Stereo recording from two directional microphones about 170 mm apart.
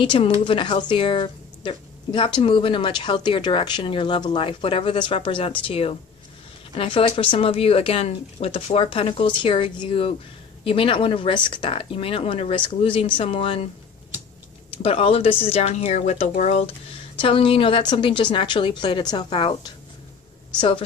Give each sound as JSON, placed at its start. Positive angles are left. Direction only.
{"t": 0.0, "sound": "speech", "side_deg": 30}
{"t": 14.8, "sound": "speech", "side_deg": 35}